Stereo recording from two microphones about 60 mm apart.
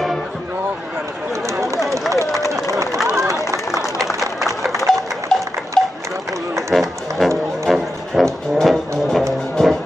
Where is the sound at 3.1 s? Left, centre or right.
Right.